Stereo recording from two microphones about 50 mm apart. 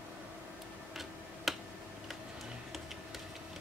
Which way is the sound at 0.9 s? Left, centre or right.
Centre.